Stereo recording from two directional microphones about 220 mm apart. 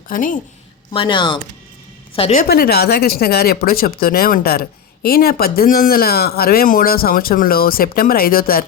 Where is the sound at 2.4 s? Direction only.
45° left (ahead or behind).